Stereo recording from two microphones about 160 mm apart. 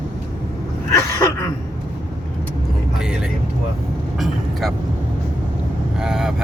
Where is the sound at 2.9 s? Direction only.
5° right (ahead or behind).